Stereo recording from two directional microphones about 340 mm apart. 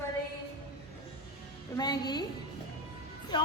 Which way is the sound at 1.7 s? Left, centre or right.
Centre.